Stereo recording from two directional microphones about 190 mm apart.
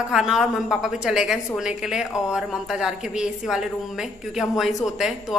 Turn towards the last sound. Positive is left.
turn(degrees=0)  # may be behind; listen again after turning